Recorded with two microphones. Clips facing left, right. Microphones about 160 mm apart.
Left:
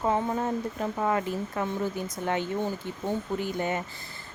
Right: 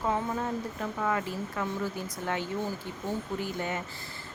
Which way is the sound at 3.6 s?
20° left (ahead or behind).